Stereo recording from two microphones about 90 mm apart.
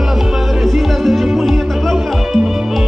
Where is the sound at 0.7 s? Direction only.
Centre (ahead or behind).